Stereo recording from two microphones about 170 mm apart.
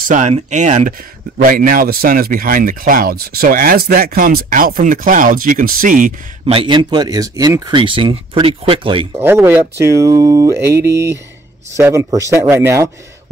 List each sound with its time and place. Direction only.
0.1 s speech: 45° right (ahead or behind)
6.4 s speech: 30° right (ahead or behind)
9.2 s speech: 10° right (ahead or behind)